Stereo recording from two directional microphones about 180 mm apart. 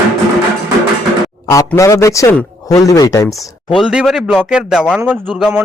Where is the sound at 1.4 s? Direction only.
20° left (ahead or behind).